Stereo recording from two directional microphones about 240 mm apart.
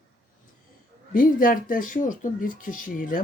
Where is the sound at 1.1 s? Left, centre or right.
Left.